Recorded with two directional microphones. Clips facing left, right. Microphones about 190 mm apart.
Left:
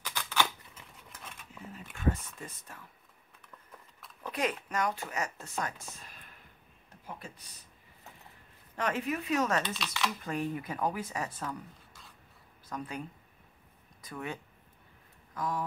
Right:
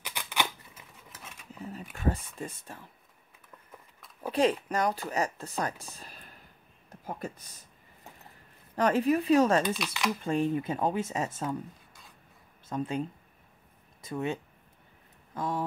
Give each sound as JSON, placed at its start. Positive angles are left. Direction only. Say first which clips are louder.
{"t": 0.0, "sound": "scissors", "louder": "left 1 dB", "side_deg": -15}
{"t": 1.7, "sound": "speech", "louder": "right 1 dB", "side_deg": -35}
{"t": 4.3, "sound": "speech", "louder": "right 7 dB", "side_deg": -30}
{"t": 8.7, "sound": "speech", "louder": "right 8 dB", "side_deg": -35}
{"t": 9.8, "sound": "speech", "louder": "right 3 dB", "side_deg": -15}
{"t": 10.2, "sound": "speech", "louder": "right 6 dB", "side_deg": -25}
{"t": 12.6, "sound": "speech", "louder": "right 7 dB", "side_deg": -25}
{"t": 14.0, "sound": "speech", "louder": "right 7 dB", "side_deg": -25}